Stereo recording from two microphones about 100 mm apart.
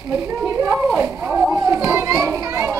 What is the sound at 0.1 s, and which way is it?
Children playing, 35° right (ahead or behind).